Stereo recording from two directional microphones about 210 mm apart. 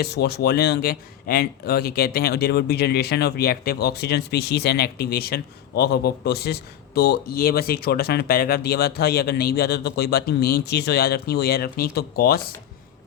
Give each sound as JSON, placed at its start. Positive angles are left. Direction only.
{"t": 0.0, "sound": "speech", "side_deg": 50}